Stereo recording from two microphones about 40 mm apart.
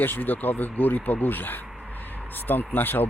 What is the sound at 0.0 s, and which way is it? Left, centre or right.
Speech, left.